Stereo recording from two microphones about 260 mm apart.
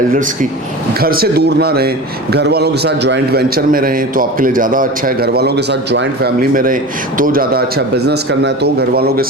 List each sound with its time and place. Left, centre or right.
1.0 s a man's voice: right